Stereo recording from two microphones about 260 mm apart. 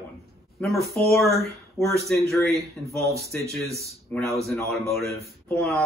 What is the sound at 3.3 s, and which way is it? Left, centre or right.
A man's voice, centre.